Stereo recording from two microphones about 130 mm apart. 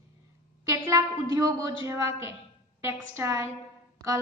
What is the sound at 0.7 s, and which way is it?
A woman's voice, 25° right (ahead or behind).